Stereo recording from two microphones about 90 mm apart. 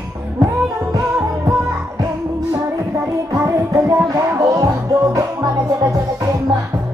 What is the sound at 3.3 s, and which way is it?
Music, 35° right (ahead or behind).